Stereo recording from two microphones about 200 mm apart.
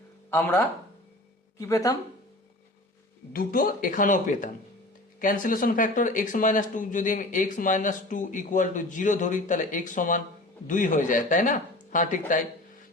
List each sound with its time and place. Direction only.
0.3 s speech: 10° left (ahead or behind)
3.3 s speech: 45° left (ahead or behind)